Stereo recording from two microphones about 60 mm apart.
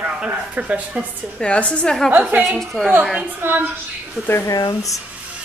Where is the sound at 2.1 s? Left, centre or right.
Right.